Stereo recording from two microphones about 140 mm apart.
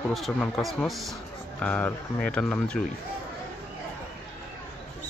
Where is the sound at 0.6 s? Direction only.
Centre (ahead or behind).